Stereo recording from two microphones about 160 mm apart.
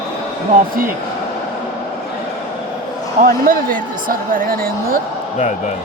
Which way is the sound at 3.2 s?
65° right (ahead or behind).